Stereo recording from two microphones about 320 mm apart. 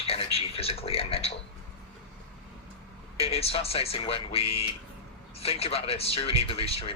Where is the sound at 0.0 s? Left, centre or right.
Centre.